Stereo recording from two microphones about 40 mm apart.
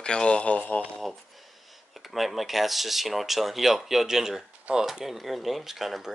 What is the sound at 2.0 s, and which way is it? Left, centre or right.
Speech, centre.